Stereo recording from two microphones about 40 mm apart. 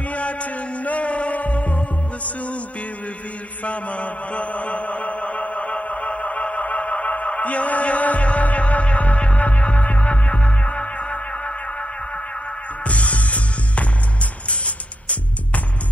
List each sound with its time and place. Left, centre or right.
0.1 s music: left
3.6 s mantra: left
12.8 s music: left